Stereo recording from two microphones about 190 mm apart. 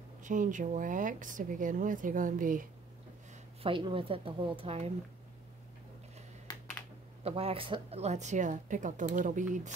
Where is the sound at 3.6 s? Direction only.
25° right (ahead or behind).